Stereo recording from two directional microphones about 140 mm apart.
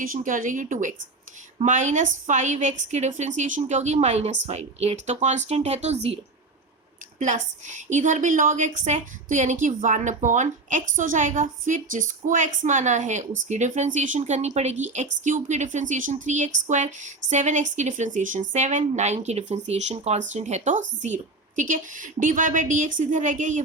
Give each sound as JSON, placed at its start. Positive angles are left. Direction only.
{"t": 0.0, "sound": "a woman's voice", "side_deg": -75}
{"t": 7.2, "sound": "a woman's voice", "side_deg": -65}